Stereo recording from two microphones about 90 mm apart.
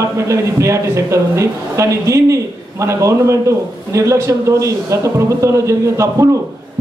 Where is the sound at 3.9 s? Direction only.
30° right (ahead or behind).